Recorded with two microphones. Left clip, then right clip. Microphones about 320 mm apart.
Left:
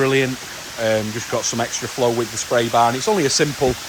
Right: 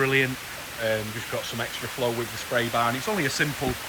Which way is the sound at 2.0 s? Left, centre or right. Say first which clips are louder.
Left 8 dB; left.